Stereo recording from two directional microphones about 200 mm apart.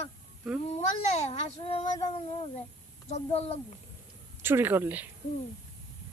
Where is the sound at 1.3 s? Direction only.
30° left (ahead or behind).